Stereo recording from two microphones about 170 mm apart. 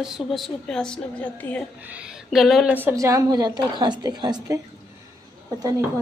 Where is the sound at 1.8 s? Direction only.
10° right (ahead or behind); by 4.6 s 25° right (ahead or behind).